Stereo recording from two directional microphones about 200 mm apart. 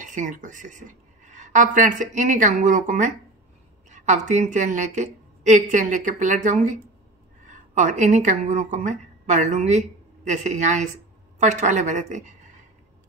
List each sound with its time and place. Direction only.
0.0 s a woman's voice: 40° right (ahead or behind)